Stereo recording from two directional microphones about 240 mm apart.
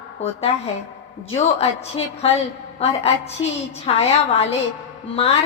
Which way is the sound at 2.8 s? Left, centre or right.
Left.